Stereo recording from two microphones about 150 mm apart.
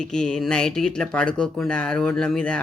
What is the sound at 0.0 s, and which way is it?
Speech, 5° left (ahead or behind).